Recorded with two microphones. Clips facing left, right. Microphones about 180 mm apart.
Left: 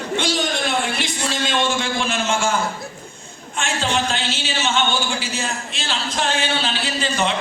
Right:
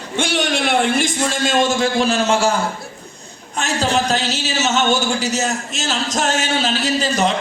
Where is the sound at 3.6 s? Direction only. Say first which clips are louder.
Right 3 dB; 40° right (ahead or behind).